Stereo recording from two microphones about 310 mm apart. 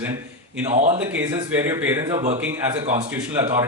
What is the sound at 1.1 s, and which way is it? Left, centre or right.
A man's voice, centre.